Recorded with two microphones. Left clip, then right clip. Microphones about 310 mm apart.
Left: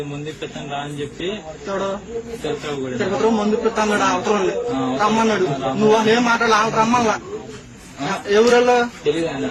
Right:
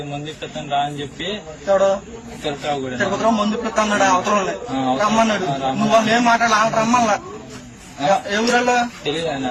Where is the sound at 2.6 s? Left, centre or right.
Centre.